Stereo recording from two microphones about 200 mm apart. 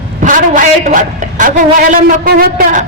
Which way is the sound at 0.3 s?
40° right (ahead or behind).